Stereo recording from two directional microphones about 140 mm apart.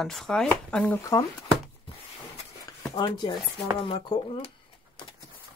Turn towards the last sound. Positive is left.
turn(degrees=40)  # may be behind; listen again after turning